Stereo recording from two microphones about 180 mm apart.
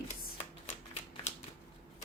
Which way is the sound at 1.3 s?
40° left (ahead or behind).